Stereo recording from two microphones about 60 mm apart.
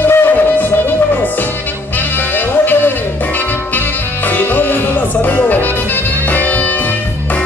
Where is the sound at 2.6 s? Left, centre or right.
Left.